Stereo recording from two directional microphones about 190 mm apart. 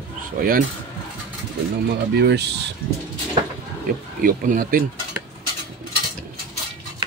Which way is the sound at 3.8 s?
45° right (ahead or behind).